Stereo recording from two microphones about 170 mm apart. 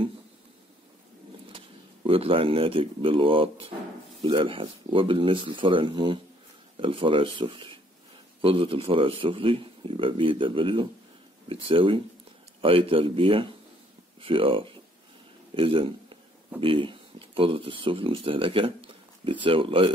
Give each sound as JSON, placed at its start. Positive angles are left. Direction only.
{"t": 2.0, "sound": "a man's voice", "side_deg": -35}